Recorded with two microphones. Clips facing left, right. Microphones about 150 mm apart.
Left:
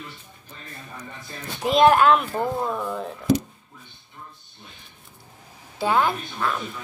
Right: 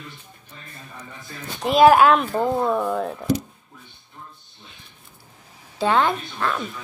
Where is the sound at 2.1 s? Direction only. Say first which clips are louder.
Right 3 dB; 30° right (ahead or behind).